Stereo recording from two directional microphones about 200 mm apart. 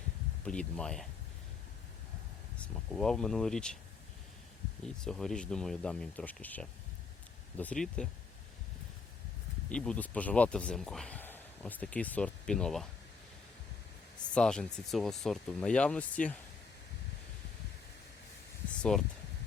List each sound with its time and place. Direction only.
0.4 s speech: 5° left (ahead or behind)
2.6 s speech: centre (ahead or behind)
5.0 s speech: centre (ahead or behind)
9.6 s speech: 5° left (ahead or behind)
14.3 s speech: 5° left (ahead or behind)
18.8 s speech: 5° left (ahead or behind)